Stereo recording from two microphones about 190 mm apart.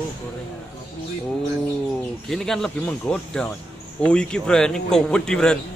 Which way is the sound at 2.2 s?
Centre (ahead or behind).